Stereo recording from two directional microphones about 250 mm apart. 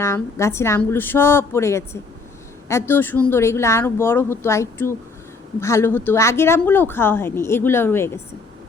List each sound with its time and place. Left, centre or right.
0.0 s speech: centre